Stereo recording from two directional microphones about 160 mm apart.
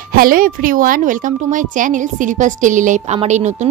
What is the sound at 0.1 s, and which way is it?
A woman's voice, 60° right (ahead or behind).